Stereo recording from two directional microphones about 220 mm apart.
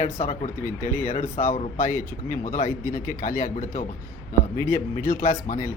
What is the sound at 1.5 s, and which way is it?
Speech, 35° left (ahead or behind).